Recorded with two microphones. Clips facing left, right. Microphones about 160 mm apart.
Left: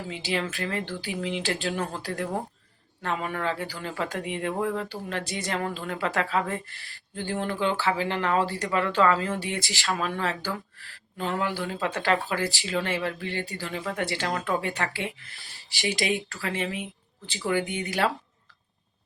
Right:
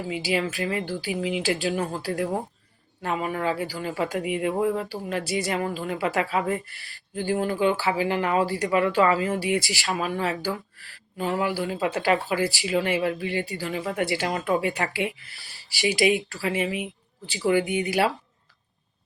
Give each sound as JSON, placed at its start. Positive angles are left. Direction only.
{"t": 0.1, "sound": "speech", "side_deg": -5}
{"t": 4.5, "sound": "speech", "side_deg": -20}
{"t": 4.9, "sound": "speech", "side_deg": -10}
{"t": 9.9, "sound": "speech", "side_deg": 0}
{"t": 10.2, "sound": "speech", "side_deg": -15}